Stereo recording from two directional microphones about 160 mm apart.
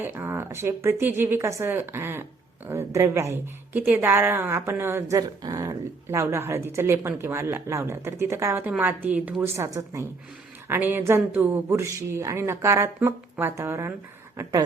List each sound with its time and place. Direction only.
0.0 s speech: 10° right (ahead or behind)